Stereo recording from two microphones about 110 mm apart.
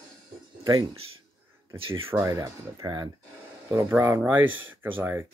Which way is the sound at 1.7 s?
55° right (ahead or behind).